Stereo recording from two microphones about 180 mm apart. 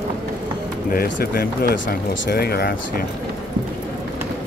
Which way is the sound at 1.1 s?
80° left.